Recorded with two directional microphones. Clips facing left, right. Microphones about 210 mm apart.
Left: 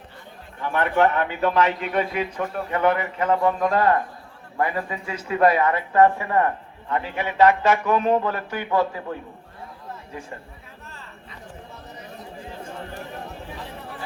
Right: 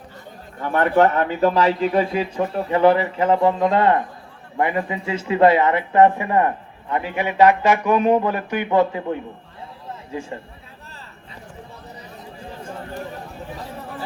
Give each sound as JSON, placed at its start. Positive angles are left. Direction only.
{"t": 0.6, "sound": "a man's voice", "side_deg": -40}